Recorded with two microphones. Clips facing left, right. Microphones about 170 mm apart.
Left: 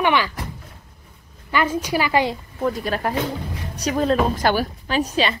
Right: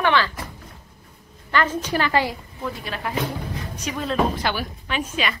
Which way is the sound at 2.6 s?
45° left (ahead or behind).